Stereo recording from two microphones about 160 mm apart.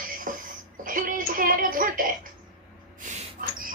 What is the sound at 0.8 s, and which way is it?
A woman's voice, 60° right (ahead or behind).